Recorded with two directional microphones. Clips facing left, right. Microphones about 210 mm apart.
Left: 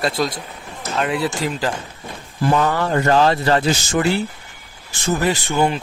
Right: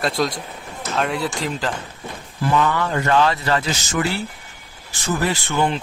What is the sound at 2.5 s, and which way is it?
Speech, 40° left (ahead or behind).